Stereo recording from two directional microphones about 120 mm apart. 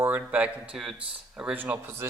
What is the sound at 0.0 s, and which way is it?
Speech, 10° right (ahead or behind).